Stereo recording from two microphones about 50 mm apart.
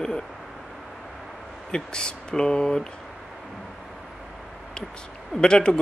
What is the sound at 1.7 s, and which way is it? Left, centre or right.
Speech, centre.